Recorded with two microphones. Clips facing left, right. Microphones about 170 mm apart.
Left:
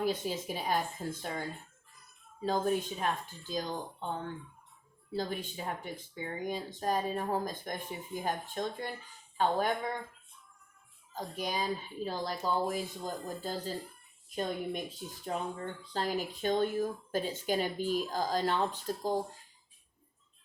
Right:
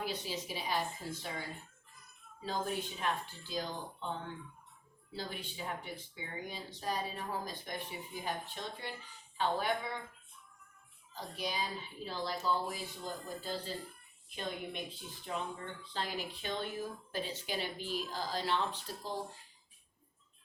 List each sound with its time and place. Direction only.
0.0 s speech: 50° left (ahead or behind)
5.1 s speech: 45° left (ahead or behind)
11.1 s speech: 45° left (ahead or behind)